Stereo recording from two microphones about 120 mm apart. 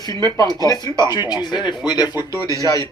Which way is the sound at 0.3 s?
35° left (ahead or behind).